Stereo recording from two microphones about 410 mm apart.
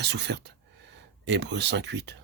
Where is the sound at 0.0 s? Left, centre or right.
Right.